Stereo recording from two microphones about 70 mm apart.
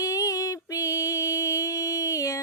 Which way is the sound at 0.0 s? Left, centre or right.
Left.